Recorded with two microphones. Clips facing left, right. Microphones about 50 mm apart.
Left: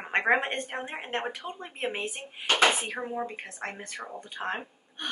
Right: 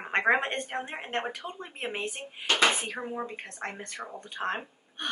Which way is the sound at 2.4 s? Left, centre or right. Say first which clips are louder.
Left 1 dB; left.